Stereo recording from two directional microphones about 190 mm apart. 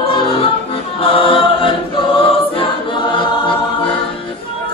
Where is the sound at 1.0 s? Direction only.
30° left (ahead or behind).